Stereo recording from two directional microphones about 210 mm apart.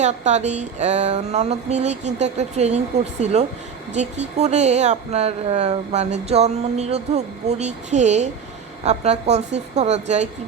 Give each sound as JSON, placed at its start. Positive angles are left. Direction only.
{"t": 0.0, "sound": "speech", "side_deg": -35}